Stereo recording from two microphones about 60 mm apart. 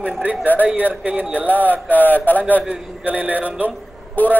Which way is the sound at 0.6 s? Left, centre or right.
Right.